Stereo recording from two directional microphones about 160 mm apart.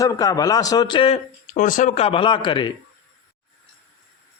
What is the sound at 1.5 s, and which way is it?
Speech, 55° left (ahead or behind).